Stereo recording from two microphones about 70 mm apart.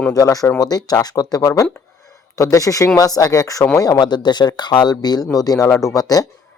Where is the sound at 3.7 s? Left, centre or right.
Left.